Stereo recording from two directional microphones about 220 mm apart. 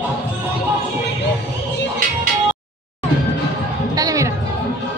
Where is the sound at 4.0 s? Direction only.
15° right (ahead or behind).